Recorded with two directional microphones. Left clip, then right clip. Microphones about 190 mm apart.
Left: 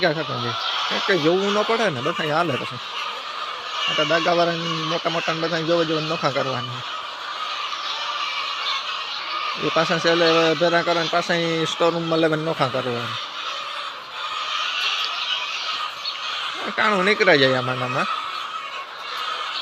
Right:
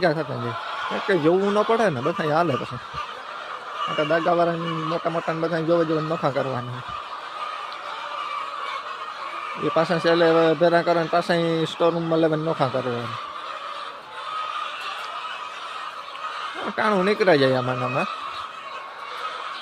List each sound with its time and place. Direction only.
0.0 s speech: 20° right (ahead or behind)
3.9 s speech: 10° right (ahead or behind)
9.7 s speech: 15° right (ahead or behind)
16.7 s speech: 20° right (ahead or behind)